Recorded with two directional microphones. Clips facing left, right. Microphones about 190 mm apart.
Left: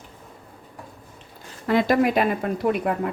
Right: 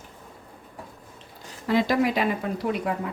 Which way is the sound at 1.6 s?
55° left (ahead or behind).